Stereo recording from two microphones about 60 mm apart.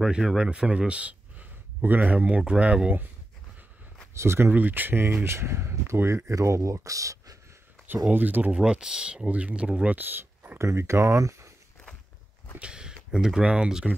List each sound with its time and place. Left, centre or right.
0.0 s speech: centre
0.7 s speech: centre
4.1 s speech: right
4.5 s speech: right
8.1 s speech: right
8.5 s speech: centre
9.9 s a sound: right
10.6 s speech: right
12.5 s speech: centre